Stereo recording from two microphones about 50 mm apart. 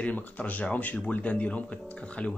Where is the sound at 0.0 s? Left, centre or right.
Left.